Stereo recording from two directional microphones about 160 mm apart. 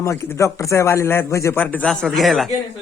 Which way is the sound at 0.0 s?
20° left (ahead or behind).